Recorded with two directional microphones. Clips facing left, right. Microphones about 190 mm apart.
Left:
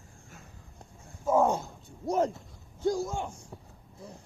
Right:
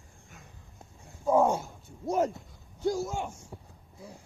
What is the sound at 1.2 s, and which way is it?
Roaring cats, 10° right (ahead or behind).